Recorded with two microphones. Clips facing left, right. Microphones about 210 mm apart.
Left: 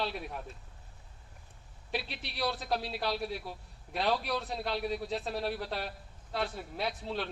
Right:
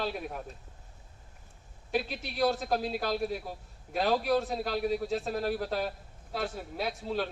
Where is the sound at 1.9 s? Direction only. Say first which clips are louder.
Right 6 dB; 45° right (ahead or behind).